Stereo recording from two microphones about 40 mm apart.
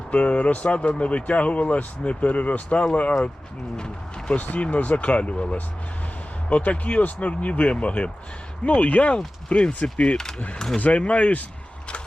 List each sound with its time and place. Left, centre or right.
0.1 s speech: left
3.8 s speech: left
4.4 s speech: left
10.8 s speech: left